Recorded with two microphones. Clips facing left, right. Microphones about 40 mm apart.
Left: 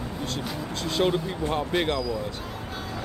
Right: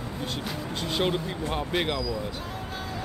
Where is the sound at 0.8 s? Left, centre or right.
Centre.